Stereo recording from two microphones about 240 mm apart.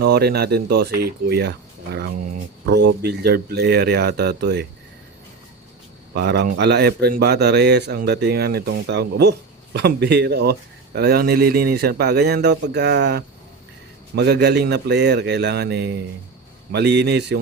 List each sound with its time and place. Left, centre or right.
0.0 s a man's voice: right
6.1 s a man's voice: right